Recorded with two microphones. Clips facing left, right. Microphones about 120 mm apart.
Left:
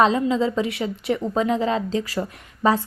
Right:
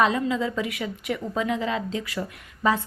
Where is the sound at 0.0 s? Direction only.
30° left (ahead or behind).